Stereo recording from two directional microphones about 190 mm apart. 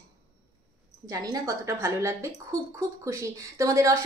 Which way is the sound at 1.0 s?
20° right (ahead or behind).